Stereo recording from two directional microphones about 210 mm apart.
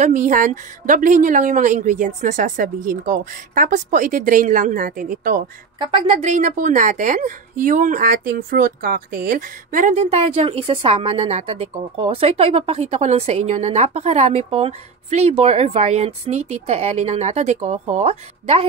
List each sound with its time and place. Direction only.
0.0 s a woman's voice: 35° right (ahead or behind)
5.8 s a woman's voice: 25° right (ahead or behind)